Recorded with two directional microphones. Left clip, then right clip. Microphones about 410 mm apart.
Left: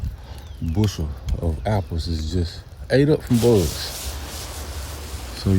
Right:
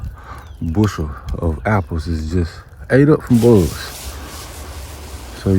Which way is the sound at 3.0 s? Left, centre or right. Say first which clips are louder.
Right 6 dB; right.